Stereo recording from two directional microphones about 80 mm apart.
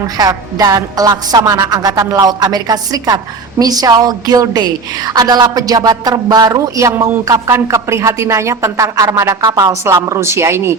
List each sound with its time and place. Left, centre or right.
0.2 s speech: right